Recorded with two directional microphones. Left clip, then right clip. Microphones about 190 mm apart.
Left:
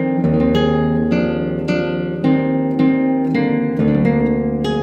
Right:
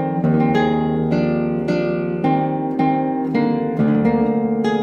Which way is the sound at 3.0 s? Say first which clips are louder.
Left 2 dB; 50° right (ahead or behind).